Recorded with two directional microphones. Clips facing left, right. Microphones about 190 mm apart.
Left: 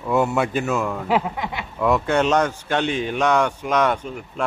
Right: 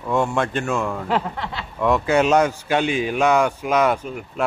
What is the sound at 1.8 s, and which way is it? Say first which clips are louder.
Speech: right 1 dB; centre (ahead or behind).